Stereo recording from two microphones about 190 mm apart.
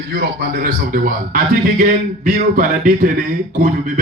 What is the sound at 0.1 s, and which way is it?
A man's voice, 55° right (ahead or behind).